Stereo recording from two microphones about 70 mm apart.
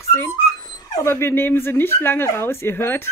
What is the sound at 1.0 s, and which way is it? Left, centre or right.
Speech, left.